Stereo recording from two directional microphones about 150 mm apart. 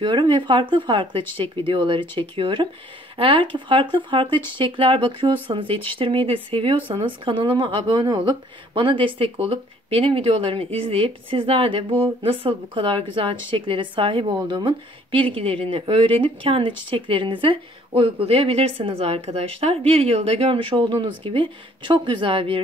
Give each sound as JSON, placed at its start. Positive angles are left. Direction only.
{"t": 0.0, "sound": "a woman's voice", "side_deg": -30}